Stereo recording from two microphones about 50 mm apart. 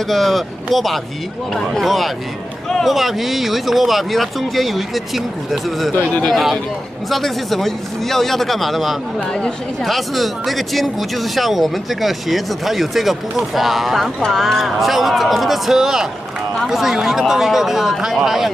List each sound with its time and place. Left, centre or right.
0.1 s speech: centre